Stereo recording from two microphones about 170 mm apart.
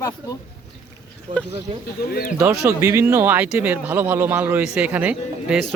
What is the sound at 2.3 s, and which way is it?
A man's voice, 15° right (ahead or behind).